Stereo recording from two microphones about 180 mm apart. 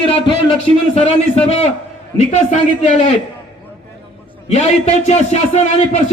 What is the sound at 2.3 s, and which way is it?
Speech, 40° left (ahead or behind).